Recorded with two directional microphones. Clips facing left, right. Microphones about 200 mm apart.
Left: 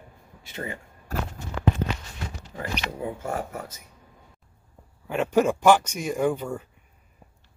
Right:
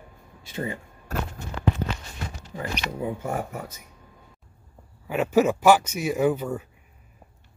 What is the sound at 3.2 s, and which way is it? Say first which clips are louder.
Speech: right 1 dB; 15° right (ahead or behind).